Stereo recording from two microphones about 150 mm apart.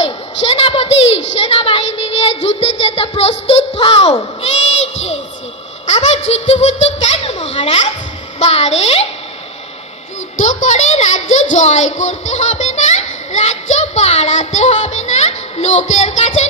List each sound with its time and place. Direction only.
0.0 s a sound: 40° left (ahead or behind)
8.4 s a child's voice: 45° left (ahead or behind)
10.3 s a child's voice: 55° left (ahead or behind)